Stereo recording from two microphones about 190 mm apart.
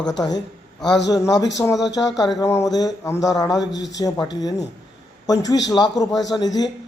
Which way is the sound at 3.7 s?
70° left (ahead or behind).